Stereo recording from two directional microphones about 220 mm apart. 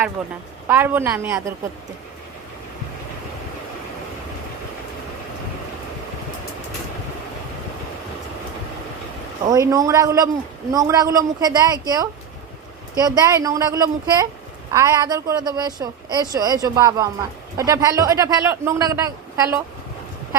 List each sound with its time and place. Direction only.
0.2 s a woman's voice: 5° right (ahead or behind)
9.5 s a woman's voice: 15° right (ahead or behind)